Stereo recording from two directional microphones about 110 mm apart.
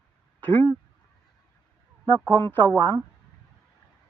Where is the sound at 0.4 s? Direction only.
15° left (ahead or behind).